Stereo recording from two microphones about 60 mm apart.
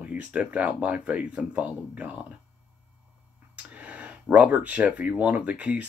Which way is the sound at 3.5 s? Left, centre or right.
Right.